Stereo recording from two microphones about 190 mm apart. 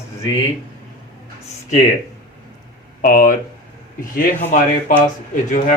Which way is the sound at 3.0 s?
45° left (ahead or behind).